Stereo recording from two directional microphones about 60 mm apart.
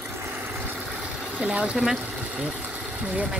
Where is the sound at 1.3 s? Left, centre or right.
Right.